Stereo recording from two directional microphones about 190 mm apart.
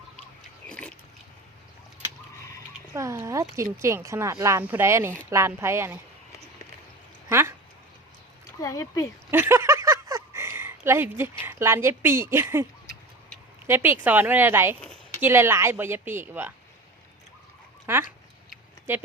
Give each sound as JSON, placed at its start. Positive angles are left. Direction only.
{"t": 0.7, "sound": "biting", "side_deg": 5}
{"t": 2.9, "sound": "a sound", "side_deg": -15}
{"t": 3.5, "sound": "speech", "side_deg": -15}
{"t": 7.3, "sound": "a sound", "side_deg": -15}
{"t": 8.6, "sound": "speech", "side_deg": 20}
{"t": 9.3, "sound": "speech", "side_deg": -10}
{"t": 13.7, "sound": "speech", "side_deg": -10}
{"t": 17.9, "sound": "speech", "side_deg": -15}